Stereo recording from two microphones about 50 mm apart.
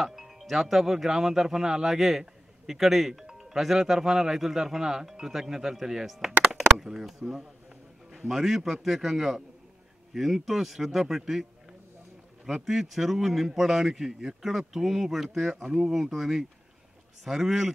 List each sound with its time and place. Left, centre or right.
0.0 s a man's voice: centre
12.6 s a man's voice: centre